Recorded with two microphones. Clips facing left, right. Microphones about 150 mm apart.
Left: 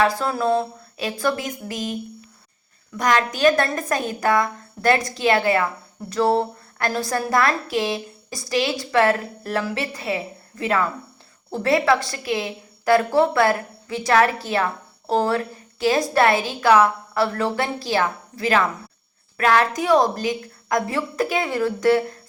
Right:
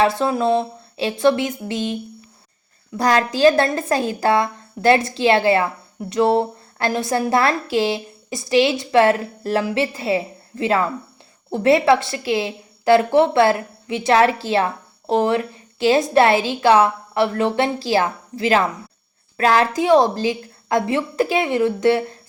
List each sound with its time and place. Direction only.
0.0 s a woman's voice: 25° right (ahead or behind)
3.0 s a woman's voice: 35° right (ahead or behind)